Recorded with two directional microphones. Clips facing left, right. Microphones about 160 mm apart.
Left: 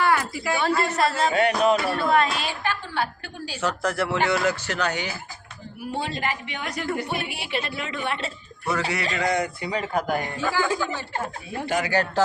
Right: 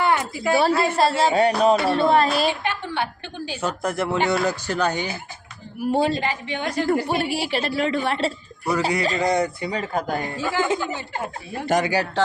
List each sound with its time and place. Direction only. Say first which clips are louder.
0.0 s a woman's voice: right 1 dB; 20° right (ahead or behind)
0.5 s a woman's voice: right 4 dB; 30° right (ahead or behind)
2.6 s a woman's voice: right 1 dB; 20° right (ahead or behind)
5.8 s a woman's voice: right 8 dB; 40° right (ahead or behind); by 11.0 s 20° right (ahead or behind)
11.6 s a woman's voice: right 5 dB; 40° right (ahead or behind)